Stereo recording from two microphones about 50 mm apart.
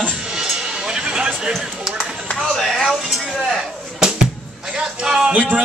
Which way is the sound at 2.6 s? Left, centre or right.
Centre.